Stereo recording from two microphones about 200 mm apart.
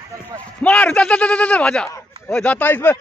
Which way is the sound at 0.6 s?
5° left (ahead or behind).